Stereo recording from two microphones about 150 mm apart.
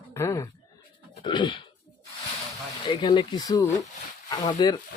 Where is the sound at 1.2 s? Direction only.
30° left (ahead or behind).